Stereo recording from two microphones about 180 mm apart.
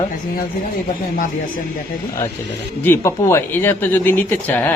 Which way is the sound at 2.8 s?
15° left (ahead or behind).